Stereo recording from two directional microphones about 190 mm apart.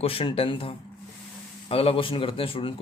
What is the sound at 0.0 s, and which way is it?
Speech, 30° left (ahead or behind).